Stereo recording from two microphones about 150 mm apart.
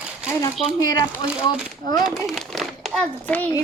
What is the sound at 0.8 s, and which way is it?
Speech, 25° left (ahead or behind).